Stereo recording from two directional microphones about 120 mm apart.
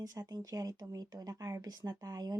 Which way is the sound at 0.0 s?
30° right (ahead or behind).